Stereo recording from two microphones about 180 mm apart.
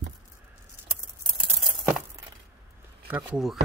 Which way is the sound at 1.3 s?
Centre (ahead or behind).